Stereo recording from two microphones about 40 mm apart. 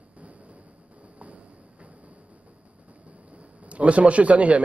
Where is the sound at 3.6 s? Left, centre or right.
Right.